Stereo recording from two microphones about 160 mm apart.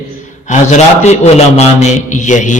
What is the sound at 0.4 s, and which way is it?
A man's voice, 45° left (ahead or behind).